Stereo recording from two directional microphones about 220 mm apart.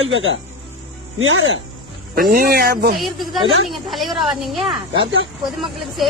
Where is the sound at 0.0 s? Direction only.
60° right (ahead or behind).